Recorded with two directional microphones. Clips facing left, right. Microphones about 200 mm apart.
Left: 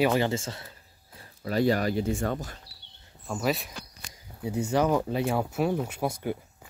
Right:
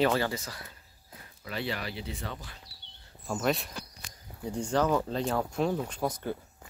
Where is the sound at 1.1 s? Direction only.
40° left (ahead or behind).